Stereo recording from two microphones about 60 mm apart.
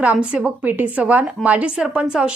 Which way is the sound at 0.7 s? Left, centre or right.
Right.